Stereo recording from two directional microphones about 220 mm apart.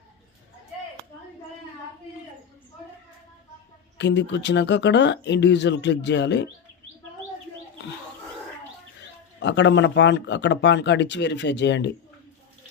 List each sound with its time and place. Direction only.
3.9 s speech: 55° left (ahead or behind)
9.4 s speech: 55° left (ahead or behind)